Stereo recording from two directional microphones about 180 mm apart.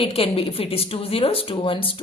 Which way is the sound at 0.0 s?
30° left (ahead or behind).